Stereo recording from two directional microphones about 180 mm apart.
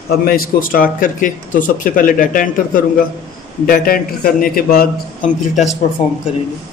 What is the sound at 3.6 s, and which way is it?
Speech, 55° left (ahead or behind).